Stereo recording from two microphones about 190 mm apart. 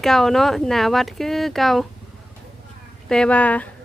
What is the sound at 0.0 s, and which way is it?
Speech, centre (ahead or behind).